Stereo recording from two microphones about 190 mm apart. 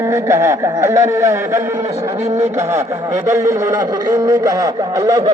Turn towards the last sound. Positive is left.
turn(degrees=-20)  # may be behind; listen again after turning